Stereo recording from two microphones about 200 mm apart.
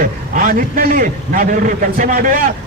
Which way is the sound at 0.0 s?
45° right (ahead or behind).